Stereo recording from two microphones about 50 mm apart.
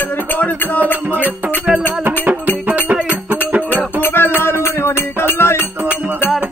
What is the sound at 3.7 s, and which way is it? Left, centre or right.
Music, left.